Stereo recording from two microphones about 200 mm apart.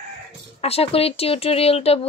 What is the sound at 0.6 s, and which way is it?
A woman's voice, 30° left (ahead or behind).